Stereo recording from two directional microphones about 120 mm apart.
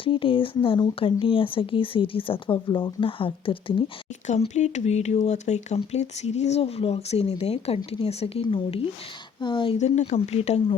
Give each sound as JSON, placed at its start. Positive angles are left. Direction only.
{"t": 0.0, "sound": "speech", "side_deg": 45}
{"t": 4.3, "sound": "speech", "side_deg": 70}
{"t": 9.7, "sound": "speech", "side_deg": 65}